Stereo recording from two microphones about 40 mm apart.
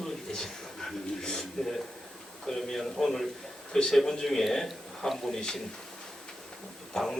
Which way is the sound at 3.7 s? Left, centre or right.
Centre.